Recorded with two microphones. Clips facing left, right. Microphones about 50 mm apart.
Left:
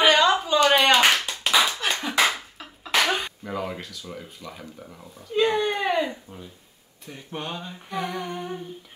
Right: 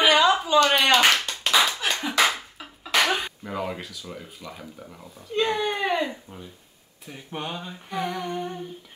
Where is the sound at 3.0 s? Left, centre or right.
Centre.